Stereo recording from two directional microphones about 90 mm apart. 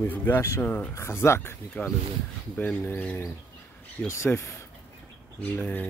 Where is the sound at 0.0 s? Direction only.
20° left (ahead or behind).